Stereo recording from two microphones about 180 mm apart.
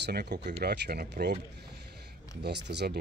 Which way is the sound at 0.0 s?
65° right (ahead or behind).